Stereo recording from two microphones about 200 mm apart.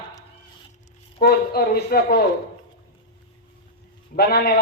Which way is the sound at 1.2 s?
50° left (ahead or behind).